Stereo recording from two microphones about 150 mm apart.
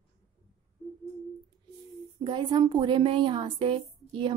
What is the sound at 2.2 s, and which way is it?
A woman's voice, 30° right (ahead or behind).